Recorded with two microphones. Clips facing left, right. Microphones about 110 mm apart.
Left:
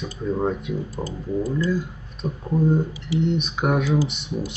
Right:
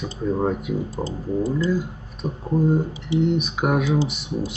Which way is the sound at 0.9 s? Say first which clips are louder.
Right 1 dB; 25° right (ahead or behind).